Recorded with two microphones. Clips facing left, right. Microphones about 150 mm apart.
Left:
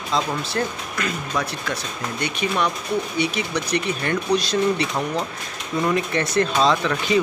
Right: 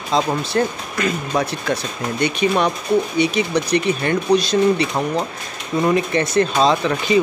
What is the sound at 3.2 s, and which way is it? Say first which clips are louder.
Speech: right 6 dB; 15° right (ahead or behind).